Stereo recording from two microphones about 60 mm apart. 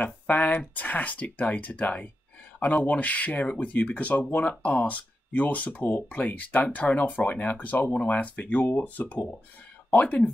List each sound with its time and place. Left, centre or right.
0.0 s speech: left